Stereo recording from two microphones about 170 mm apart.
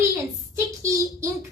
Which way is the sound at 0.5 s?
20° right (ahead or behind).